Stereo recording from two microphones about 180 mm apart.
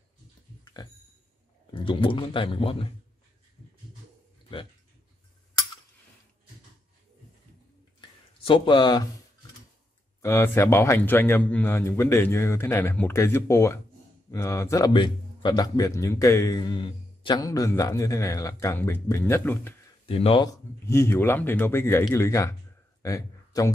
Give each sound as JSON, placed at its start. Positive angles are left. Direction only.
{"t": 1.7, "sound": "speech", "side_deg": 25}
{"t": 8.5, "sound": "speech", "side_deg": 25}
{"t": 10.2, "sound": "a man's voice", "side_deg": 15}
{"t": 20.1, "sound": "speech", "side_deg": 30}
{"t": 20.8, "sound": "a man's voice", "side_deg": 15}